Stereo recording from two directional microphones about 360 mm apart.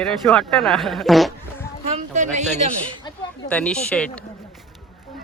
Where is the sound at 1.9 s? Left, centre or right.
Centre.